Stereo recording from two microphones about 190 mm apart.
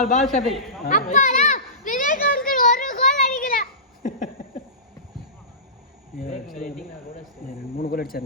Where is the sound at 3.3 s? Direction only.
45° left (ahead or behind).